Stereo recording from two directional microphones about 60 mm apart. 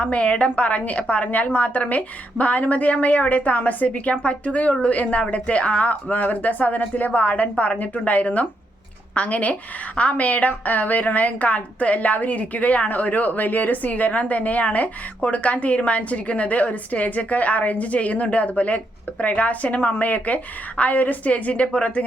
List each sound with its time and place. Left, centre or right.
0.0 s a woman's voice: left